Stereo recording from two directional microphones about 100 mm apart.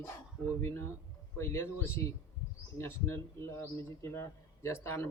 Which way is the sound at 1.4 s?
25° left (ahead or behind).